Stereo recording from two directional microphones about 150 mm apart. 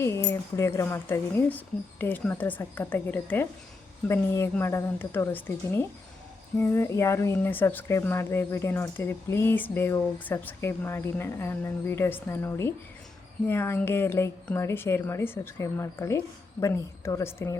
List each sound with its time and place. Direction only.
0.0 s speech: 20° left (ahead or behind)